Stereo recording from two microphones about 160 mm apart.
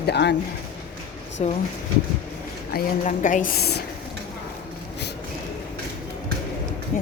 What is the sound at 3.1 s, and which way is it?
Speech, 55° left (ahead or behind).